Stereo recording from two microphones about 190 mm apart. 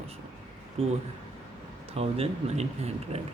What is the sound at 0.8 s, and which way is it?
Speech, 30° right (ahead or behind).